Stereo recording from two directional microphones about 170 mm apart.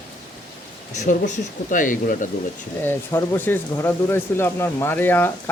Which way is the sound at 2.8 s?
15° left (ahead or behind).